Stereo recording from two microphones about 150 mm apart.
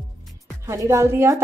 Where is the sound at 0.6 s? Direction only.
20° right (ahead or behind).